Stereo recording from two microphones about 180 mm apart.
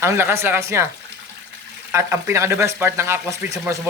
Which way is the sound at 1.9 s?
15° right (ahead or behind).